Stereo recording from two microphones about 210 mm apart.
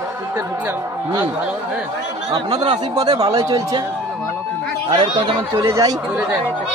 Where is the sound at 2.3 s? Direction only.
20° right (ahead or behind).